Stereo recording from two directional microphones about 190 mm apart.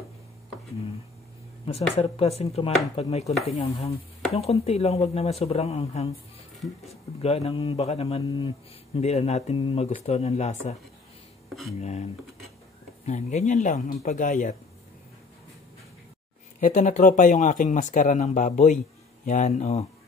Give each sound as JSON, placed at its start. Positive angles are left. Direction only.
{"t": 1.7, "sound": "speech", "side_deg": 30}
{"t": 3.6, "sound": "stir", "side_deg": 30}
{"t": 4.3, "sound": "speech", "side_deg": 30}
{"t": 7.2, "sound": "speech", "side_deg": 35}
{"t": 11.8, "sound": "speech", "side_deg": 35}
{"t": 16.5, "sound": "speech", "side_deg": 40}